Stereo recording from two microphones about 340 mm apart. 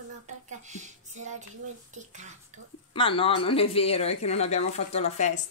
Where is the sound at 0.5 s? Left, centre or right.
Right.